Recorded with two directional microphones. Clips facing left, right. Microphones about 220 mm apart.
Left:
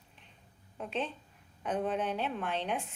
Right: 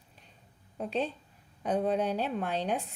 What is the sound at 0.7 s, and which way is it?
A woman's voice, 40° right (ahead or behind).